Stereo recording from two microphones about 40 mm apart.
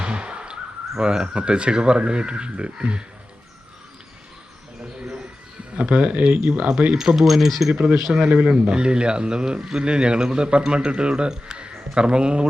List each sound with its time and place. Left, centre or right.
0.0 s speech: right
5.7 s speech: right
6.4 s a man's voice: right
7.0 s speech: centre
7.7 s a man's voice: right